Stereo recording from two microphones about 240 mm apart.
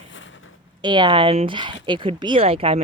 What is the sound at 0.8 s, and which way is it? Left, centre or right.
Speech, centre.